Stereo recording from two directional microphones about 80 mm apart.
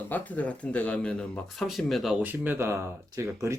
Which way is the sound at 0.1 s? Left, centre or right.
Centre.